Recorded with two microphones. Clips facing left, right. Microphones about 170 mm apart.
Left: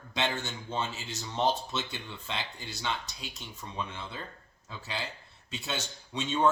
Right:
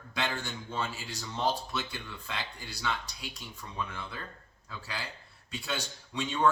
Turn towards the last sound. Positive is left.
turn(degrees=25)  # may be behind; listen again after turning